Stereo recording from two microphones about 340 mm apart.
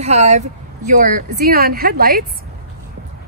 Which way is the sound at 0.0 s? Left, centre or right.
Centre.